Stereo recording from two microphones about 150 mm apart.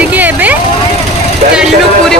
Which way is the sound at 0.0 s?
10° right (ahead or behind).